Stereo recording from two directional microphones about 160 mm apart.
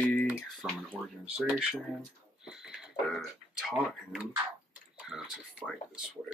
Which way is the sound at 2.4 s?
5° right (ahead or behind).